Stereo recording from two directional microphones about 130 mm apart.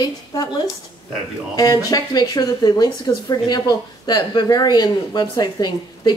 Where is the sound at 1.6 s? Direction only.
30° left (ahead or behind).